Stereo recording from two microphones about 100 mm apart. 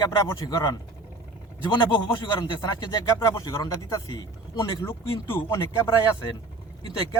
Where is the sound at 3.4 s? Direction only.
50° left (ahead or behind).